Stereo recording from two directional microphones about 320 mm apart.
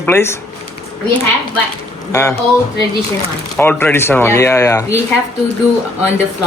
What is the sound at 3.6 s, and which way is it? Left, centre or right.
A man's voice, centre.